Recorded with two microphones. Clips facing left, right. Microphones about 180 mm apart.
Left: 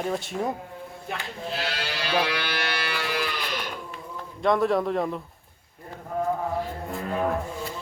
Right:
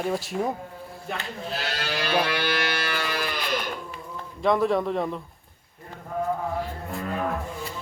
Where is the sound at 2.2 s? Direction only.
50° right (ahead or behind).